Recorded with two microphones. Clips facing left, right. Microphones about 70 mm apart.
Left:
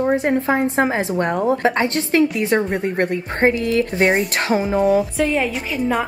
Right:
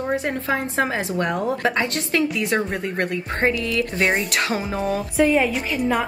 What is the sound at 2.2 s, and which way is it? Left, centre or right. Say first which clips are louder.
Speech: left 4 dB; centre.